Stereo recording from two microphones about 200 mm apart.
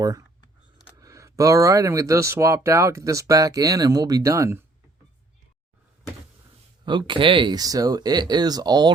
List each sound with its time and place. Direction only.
0.9 s speech: 15° right (ahead or behind)
6.8 s speech: 25° right (ahead or behind)